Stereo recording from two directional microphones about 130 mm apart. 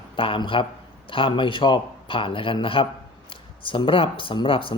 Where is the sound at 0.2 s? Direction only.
40° left (ahead or behind).